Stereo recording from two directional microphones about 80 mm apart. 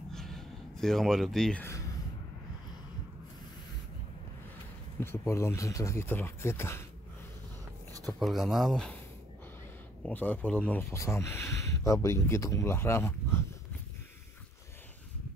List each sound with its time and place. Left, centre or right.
0.1 s a sound: centre
5.0 s speech: left
8.1 s speech: centre
10.0 s speech: left
10.9 s speech: left
12.7 s speech: left